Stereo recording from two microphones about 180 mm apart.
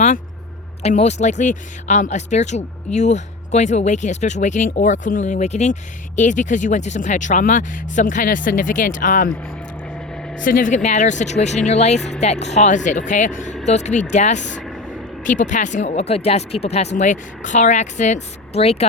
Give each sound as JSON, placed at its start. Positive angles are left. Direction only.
{"t": 0.8, "sound": "speech", "side_deg": 35}
{"t": 9.3, "sound": "a sound", "side_deg": 10}
{"t": 10.4, "sound": "speech", "side_deg": 45}
{"t": 11.9, "sound": "speech", "side_deg": 0}
{"t": 12.2, "sound": "speech", "side_deg": 40}
{"t": 14.6, "sound": "vehicle", "side_deg": 0}
{"t": 15.2, "sound": "speech", "side_deg": 45}